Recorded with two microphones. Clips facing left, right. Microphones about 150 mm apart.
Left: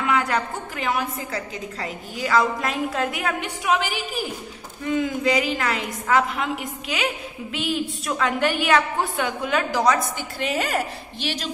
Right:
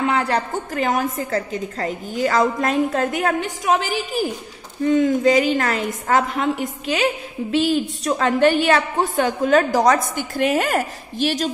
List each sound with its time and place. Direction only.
0.0 s a woman's voice: 35° right (ahead or behind)